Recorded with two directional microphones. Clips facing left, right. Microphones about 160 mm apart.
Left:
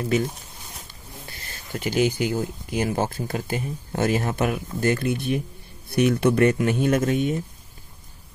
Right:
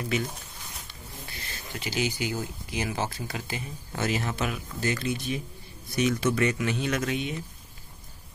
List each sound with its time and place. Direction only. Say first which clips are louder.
0.1 s speech: left 7 dB; 45° left (ahead or behind)
1.3 s speech: left 6 dB; 50° left (ahead or behind)